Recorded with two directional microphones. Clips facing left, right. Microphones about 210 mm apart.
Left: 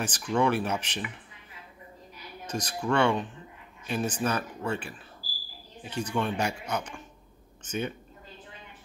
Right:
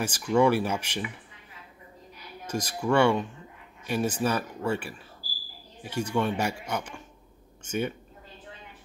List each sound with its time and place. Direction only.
0.0 s speech: 10° right (ahead or behind)
2.4 s speech: 10° right (ahead or behind)